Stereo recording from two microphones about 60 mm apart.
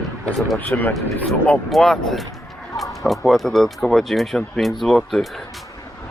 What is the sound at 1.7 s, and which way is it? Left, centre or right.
Speech, centre.